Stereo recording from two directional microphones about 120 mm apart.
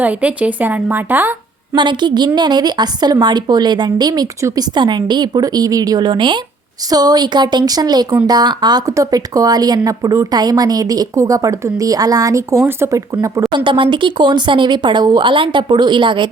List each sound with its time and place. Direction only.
0.0 s a woman's voice: 10° right (ahead or behind)
1.7 s speech: 40° right (ahead or behind)
13.7 s speech: 45° right (ahead or behind)